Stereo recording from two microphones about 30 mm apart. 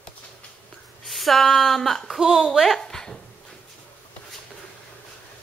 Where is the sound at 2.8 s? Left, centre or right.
Centre.